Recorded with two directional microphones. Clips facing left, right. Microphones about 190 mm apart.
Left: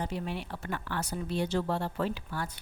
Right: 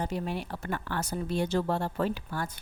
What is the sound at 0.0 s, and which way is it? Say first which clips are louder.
A woman's voice: right 2 dB; 45° right (ahead or behind).